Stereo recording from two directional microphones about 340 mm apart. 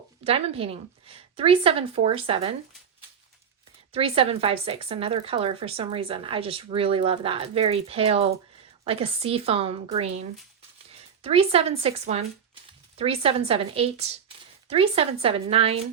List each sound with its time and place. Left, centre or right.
0.3 s speech: centre
3.9 s speech: centre